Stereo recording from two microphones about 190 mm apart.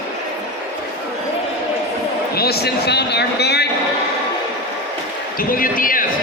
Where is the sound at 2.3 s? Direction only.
55° left (ahead or behind).